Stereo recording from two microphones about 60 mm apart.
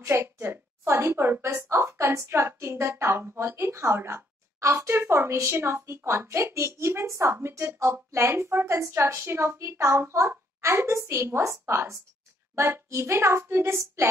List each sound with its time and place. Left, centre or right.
0.0 s a woman's voice: right